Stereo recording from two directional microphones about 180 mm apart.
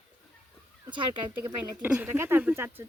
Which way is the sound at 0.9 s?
25° right (ahead or behind).